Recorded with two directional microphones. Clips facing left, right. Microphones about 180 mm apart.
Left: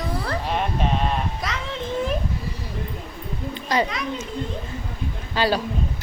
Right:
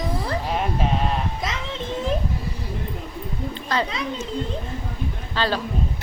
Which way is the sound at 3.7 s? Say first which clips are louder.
Left 2 dB; 15° left (ahead or behind).